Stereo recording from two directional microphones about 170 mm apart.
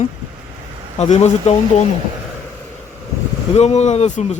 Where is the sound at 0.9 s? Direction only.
40° left (ahead or behind).